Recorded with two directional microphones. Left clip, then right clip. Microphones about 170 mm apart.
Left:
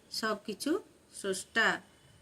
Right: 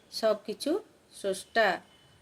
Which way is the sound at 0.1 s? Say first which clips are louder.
Right 7 dB; 20° left (ahead or behind).